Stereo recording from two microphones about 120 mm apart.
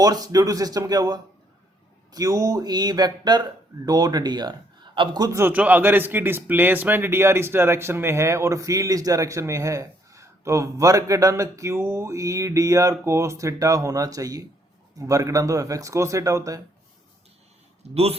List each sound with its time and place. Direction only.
0.0 s speech: 30° right (ahead or behind)
5.4 s speech: 15° right (ahead or behind)
17.9 s a man's voice: 60° right (ahead or behind)